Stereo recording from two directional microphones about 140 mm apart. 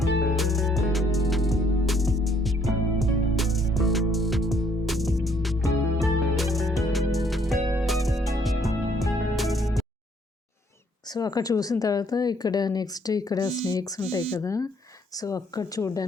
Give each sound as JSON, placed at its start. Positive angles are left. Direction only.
{"t": 0.0, "sound": "music", "side_deg": 0}
{"t": 11.0, "sound": "speech", "side_deg": 30}